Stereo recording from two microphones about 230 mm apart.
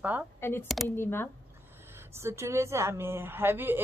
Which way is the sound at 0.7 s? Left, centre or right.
Centre.